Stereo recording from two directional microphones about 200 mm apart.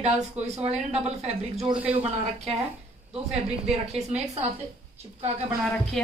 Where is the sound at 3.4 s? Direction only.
35° right (ahead or behind).